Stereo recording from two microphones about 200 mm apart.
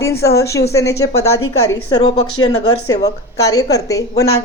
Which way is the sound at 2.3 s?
90° left.